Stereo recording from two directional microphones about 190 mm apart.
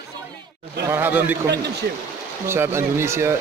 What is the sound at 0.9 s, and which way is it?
Speech, 10° right (ahead or behind).